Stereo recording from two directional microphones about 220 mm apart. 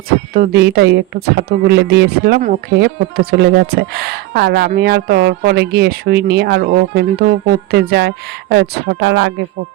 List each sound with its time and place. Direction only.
0.3 s speech: 45° right (ahead or behind)
2.4 s speech: 35° right (ahead or behind)
2.7 s speech: 45° right (ahead or behind)